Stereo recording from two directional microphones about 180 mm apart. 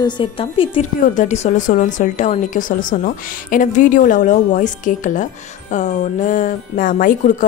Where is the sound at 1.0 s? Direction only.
40° left (ahead or behind).